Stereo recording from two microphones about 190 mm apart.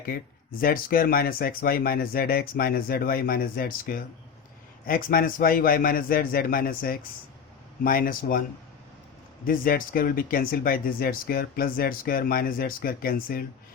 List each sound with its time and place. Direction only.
0.6 s speech: 50° left (ahead or behind)
9.5 s speech: 50° left (ahead or behind)